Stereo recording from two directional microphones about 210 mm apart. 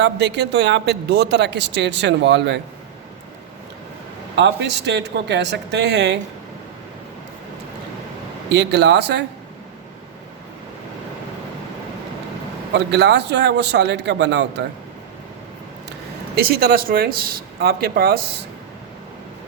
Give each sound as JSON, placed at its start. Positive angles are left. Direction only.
{"t": 0.0, "sound": "speech", "side_deg": -55}
{"t": 4.4, "sound": "speech", "side_deg": -55}
{"t": 8.5, "sound": "a man's voice", "side_deg": -55}
{"t": 12.7, "sound": "a man's voice", "side_deg": -55}
{"t": 15.9, "sound": "speech", "side_deg": -50}